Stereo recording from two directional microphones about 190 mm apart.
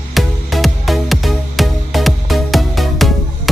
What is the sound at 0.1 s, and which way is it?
Music, centre (ahead or behind).